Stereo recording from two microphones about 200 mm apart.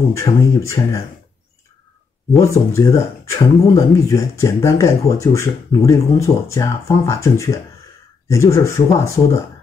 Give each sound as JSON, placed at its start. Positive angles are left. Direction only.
{"t": 0.1, "sound": "speech", "side_deg": 15}
{"t": 2.3, "sound": "speech", "side_deg": 15}